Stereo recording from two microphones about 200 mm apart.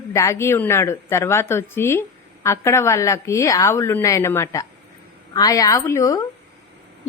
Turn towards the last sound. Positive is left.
turn(degrees=15)  # may be behind; listen again after turning